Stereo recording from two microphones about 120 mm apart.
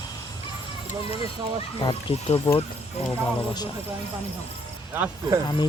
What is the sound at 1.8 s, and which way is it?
Speech, 50° left (ahead or behind).